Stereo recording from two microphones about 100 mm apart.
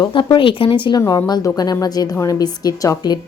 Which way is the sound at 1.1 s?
40° left (ahead or behind).